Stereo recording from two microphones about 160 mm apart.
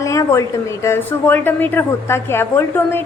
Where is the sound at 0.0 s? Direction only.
20° left (ahead or behind).